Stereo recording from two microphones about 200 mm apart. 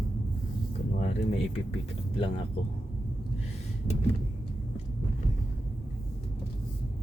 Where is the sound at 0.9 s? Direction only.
35° left (ahead or behind).